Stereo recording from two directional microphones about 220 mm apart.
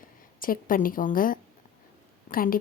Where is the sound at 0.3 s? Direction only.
40° left (ahead or behind).